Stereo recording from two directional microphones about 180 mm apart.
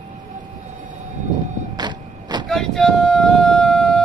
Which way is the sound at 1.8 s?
25° right (ahead or behind).